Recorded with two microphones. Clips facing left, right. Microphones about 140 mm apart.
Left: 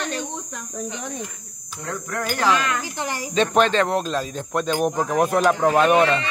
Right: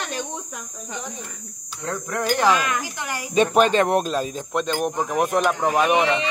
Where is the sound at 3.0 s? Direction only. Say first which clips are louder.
Left 3 dB; 30° left (ahead or behind).